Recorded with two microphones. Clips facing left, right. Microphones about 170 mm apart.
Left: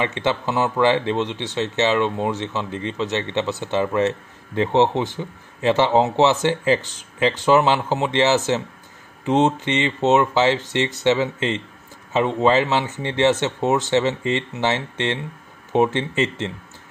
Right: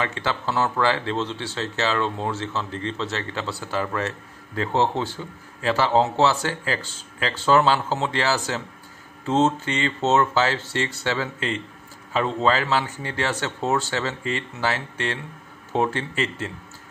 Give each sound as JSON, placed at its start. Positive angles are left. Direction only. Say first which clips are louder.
{"t": 0.0, "sound": "speech", "louder": "left 4 dB", "side_deg": 20}